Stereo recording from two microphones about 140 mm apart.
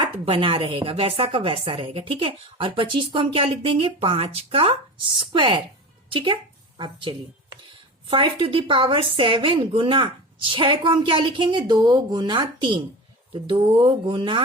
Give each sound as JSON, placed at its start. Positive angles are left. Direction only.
{"t": 0.3, "sound": "a woman's voice", "side_deg": -40}